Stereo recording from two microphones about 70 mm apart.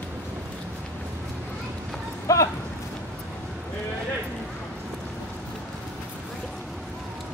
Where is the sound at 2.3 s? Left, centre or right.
Left.